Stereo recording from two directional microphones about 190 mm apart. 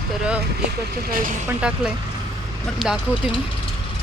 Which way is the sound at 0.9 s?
50° right (ahead or behind).